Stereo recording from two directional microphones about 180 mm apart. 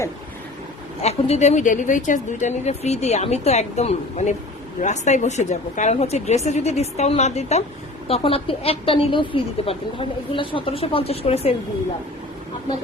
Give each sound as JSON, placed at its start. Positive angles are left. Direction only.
{"t": 1.0, "sound": "a woman's voice", "side_deg": 35}